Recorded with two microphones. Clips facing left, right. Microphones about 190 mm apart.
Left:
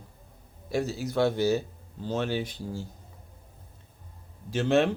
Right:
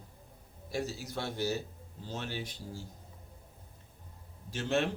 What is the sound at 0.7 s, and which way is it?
A man's voice, 70° left (ahead or behind).